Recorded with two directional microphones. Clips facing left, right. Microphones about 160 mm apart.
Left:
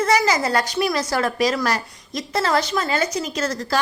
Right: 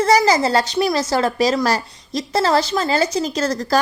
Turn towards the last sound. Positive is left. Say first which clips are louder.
# right 4 dB
turn(degrees=-35)  # may be behind; listen again after turning